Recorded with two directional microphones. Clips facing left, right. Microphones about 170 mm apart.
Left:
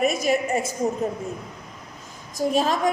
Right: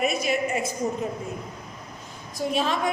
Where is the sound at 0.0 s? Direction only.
45° left (ahead or behind).